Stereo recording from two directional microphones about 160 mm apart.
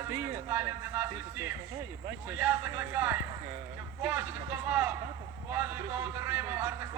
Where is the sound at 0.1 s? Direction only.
15° right (ahead or behind).